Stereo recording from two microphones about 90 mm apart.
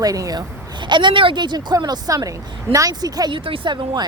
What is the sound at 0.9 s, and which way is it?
Speech, 60° right (ahead or behind).